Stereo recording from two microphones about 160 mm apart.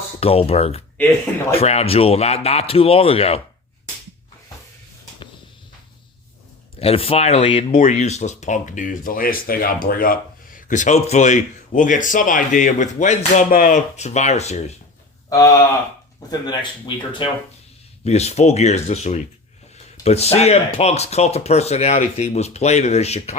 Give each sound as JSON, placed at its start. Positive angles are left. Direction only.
{"t": 0.2, "sound": "speech", "side_deg": 40}
{"t": 6.7, "sound": "speech", "side_deg": 35}
{"t": 7.7, "sound": "speech", "side_deg": 55}
{"t": 15.3, "sound": "speech", "side_deg": 20}
{"t": 18.0, "sound": "speech", "side_deg": 45}